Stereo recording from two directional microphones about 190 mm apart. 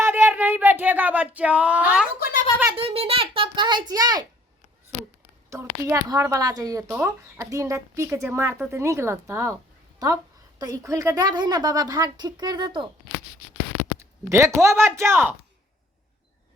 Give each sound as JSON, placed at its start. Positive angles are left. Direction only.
{"t": 0.0, "sound": "a sound", "side_deg": -10}
{"t": 2.1, "sound": "speech", "side_deg": 50}
{"t": 2.6, "sound": "a woman's voice", "side_deg": -30}
{"t": 5.5, "sound": "a woman's voice", "side_deg": -15}
{"t": 6.8, "sound": "a woman's voice", "side_deg": -5}
{"t": 10.6, "sound": "a woman's voice", "side_deg": -20}
{"t": 14.3, "sound": "a woman's voice", "side_deg": -15}